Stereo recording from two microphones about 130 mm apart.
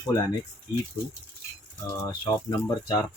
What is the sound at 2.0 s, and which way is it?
Speech, 25° left (ahead or behind).